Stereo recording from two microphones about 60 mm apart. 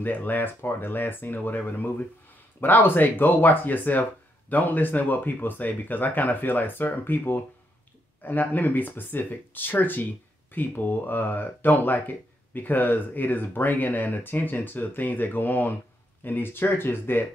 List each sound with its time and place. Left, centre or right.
0.0 s speech: left